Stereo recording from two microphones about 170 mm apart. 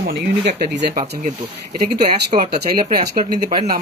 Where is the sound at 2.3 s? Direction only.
55° right (ahead or behind).